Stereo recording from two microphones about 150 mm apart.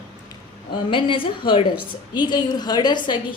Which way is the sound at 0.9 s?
35° left (ahead or behind).